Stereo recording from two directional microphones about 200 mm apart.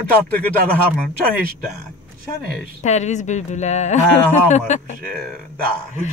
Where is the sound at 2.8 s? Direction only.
35° left (ahead or behind).